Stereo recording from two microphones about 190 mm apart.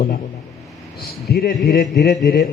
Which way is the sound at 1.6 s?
55° left (ahead or behind).